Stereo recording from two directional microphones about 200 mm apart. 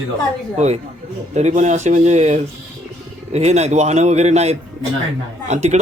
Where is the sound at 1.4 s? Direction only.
35° right (ahead or behind).